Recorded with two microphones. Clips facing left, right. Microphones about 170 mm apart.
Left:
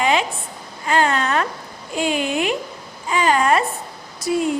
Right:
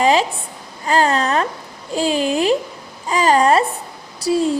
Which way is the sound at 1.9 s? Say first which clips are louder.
Right 3 dB; 35° right (ahead or behind).